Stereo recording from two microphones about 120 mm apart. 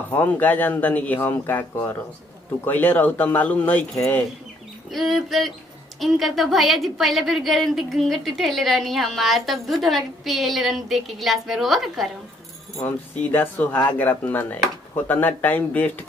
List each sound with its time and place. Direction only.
0.1 s speech: 15° left (ahead or behind)
3.9 s speech: 25° left (ahead or behind)
4.9 s a woman's voice: centre (ahead or behind)
13.3 s speech: 15° left (ahead or behind)